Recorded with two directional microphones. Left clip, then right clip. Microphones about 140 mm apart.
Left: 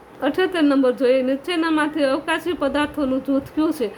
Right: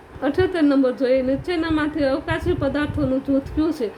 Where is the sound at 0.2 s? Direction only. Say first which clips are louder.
Even; 15° left (ahead or behind).